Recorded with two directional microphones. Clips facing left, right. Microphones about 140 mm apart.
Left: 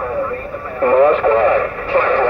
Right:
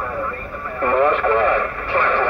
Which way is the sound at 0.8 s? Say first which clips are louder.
Left 6 dB; 15° left (ahead or behind).